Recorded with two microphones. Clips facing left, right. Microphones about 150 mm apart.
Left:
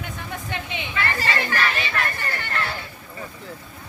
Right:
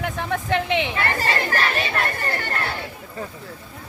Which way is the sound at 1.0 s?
45° right (ahead or behind).